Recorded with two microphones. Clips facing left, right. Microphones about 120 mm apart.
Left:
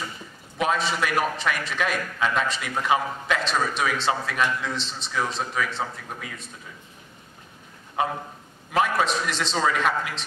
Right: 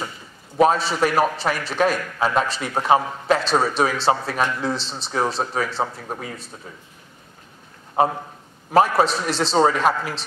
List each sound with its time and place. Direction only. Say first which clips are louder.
0.6 s a man's voice: right 7 dB; 35° right (ahead or behind)
8.0 s a man's voice: right 6 dB; 35° right (ahead or behind)